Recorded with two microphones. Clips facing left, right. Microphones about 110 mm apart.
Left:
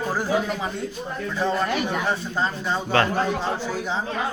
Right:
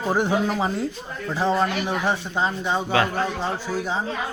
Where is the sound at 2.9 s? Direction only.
5° right (ahead or behind).